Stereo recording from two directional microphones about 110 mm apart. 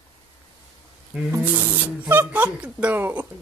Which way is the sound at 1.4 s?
20° right (ahead or behind).